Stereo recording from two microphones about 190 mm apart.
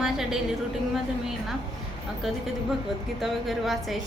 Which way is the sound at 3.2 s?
Centre (ahead or behind).